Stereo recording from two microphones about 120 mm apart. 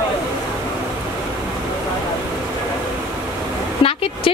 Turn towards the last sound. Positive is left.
turn(degrees=50)  # may be behind; listen again after turning